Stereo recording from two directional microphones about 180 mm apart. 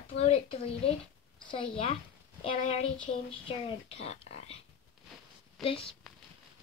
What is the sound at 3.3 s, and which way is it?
A child's voice, 30° left (ahead or behind).